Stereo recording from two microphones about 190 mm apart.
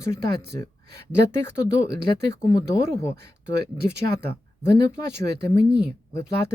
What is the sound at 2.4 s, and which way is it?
Speech, 15° left (ahead or behind).